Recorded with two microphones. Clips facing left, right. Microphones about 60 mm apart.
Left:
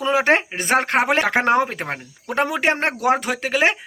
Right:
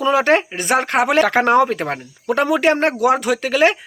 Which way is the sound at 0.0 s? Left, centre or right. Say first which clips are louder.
Right 3 dB; left.